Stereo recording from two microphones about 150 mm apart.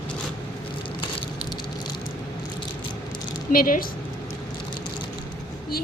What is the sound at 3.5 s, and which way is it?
Speech, 70° left (ahead or behind).